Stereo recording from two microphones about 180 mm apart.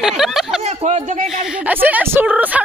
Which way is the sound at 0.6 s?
40° right (ahead or behind).